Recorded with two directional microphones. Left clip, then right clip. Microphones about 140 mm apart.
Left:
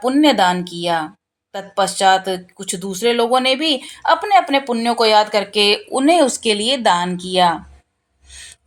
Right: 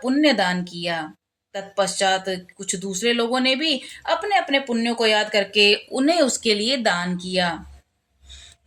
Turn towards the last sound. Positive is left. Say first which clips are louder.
# left 8 dB
turn(degrees=20)  # may be behind; listen again after turning